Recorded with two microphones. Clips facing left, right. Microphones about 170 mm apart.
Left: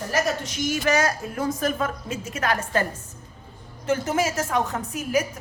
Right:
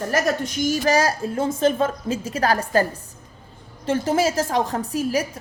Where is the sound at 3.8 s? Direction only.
30° right (ahead or behind).